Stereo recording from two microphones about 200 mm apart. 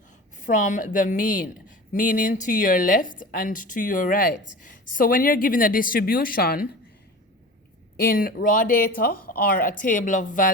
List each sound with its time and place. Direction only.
0.3 s a woman's voice: 40° left (ahead or behind)
8.0 s a woman's voice: 45° left (ahead or behind)